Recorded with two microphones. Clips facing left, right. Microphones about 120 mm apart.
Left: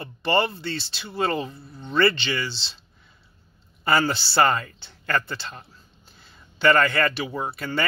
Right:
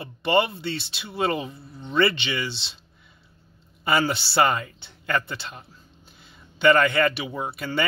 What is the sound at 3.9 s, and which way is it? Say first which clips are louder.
Speech: left 1 dB; 15° right (ahead or behind).